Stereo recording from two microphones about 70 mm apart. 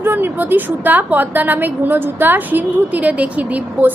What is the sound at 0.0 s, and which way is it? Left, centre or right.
A woman's voice, right.